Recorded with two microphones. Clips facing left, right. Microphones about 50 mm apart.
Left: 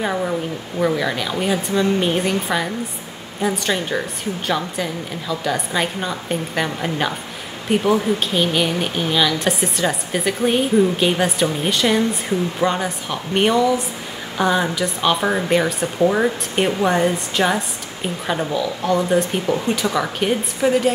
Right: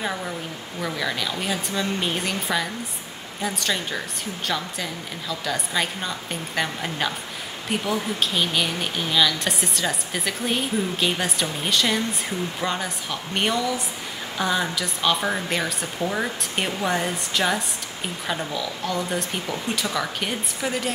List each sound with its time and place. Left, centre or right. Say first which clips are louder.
0.0 s speech: left 7 dB; centre